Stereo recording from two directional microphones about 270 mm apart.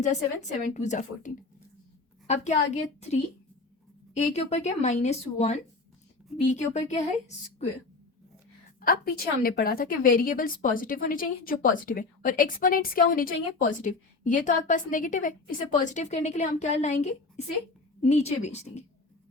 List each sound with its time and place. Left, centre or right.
0.7 s speech: left
8.8 s a woman's voice: left